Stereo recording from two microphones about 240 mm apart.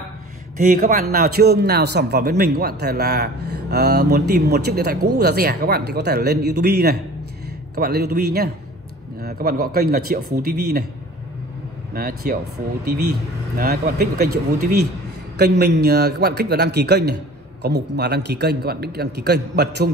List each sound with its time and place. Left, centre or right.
0.6 s a man's voice: right
11.9 s speech: right
15.3 s a man's voice: right